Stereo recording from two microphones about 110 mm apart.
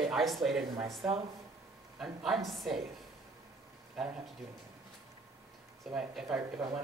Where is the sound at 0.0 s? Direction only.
Centre (ahead or behind).